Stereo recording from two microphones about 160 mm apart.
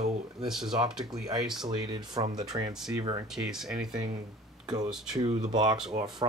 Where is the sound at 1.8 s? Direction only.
25° right (ahead or behind).